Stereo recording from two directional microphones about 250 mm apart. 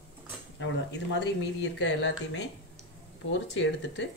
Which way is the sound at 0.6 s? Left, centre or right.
Left.